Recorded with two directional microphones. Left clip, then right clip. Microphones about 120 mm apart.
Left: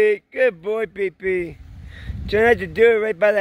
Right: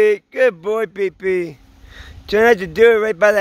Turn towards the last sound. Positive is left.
turn(degrees=-20)  # may be behind; listen again after turning